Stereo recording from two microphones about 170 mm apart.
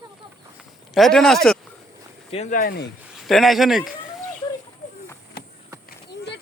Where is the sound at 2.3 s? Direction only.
40° left (ahead or behind).